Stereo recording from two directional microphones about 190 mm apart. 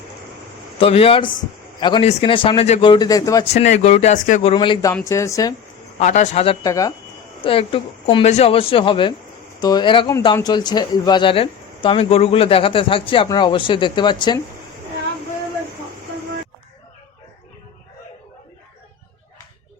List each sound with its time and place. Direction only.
0.8 s speech: 30° left (ahead or behind)
2.9 s speech: 20° left (ahead or behind)
3.4 s speech: 35° left (ahead or behind)
4.5 s speech: 25° left (ahead or behind)
6.0 s speech: 35° left (ahead or behind)
6.7 s speech: 15° left (ahead or behind)
7.4 s speech: 30° left (ahead or behind)